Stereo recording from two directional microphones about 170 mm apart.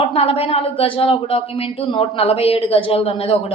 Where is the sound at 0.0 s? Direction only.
35° left (ahead or behind).